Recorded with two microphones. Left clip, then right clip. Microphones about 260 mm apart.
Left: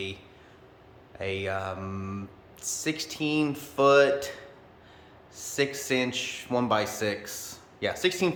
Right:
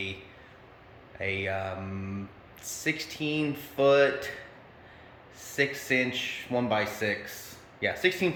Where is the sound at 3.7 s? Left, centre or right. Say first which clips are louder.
Left 2 dB; centre.